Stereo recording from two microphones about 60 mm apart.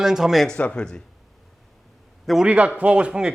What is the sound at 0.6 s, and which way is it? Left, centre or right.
Speech, centre.